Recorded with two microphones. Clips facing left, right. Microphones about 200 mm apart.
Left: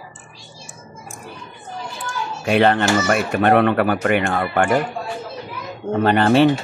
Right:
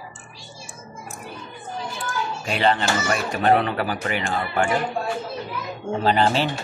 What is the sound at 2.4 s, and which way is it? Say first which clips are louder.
Speech: left 6 dB; 60° left (ahead or behind).